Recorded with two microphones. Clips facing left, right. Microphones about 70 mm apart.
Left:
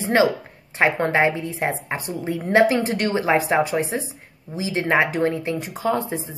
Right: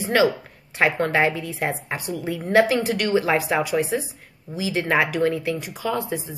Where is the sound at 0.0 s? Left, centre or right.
Left.